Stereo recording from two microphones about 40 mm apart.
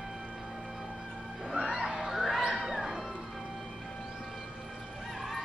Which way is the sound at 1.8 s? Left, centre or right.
Centre.